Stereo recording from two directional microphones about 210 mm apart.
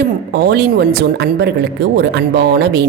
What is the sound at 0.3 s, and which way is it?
Speech, 50° right (ahead or behind).